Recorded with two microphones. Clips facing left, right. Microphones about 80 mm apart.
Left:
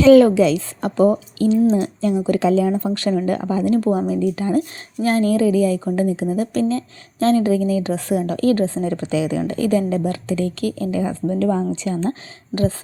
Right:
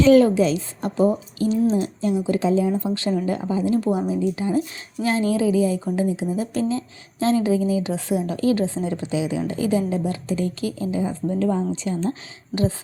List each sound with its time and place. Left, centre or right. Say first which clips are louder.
0.1 s a woman's voice: left 6 dB; left
2.1 s speech: left 3 dB; left
3.8 s speech: left 3 dB; left
4.1 s speech: left 3 dB; left
9.0 s speech: left 3 dB; left
10.7 s a woman's voice: left 3 dB; left